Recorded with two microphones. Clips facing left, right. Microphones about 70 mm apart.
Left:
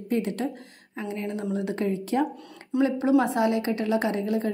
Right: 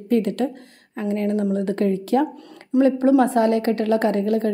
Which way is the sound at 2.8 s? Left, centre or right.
Right.